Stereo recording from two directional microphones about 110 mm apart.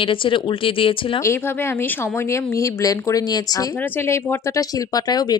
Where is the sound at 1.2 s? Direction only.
25° left (ahead or behind).